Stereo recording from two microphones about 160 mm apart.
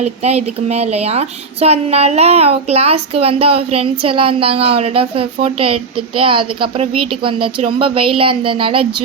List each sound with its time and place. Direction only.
0.0 s a woman's voice: 45° right (ahead or behind)